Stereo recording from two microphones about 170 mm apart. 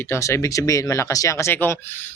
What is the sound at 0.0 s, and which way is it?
A man's voice, 15° left (ahead or behind).